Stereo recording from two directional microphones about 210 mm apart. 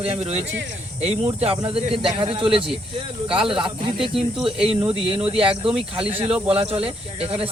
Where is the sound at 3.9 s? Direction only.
Centre (ahead or behind).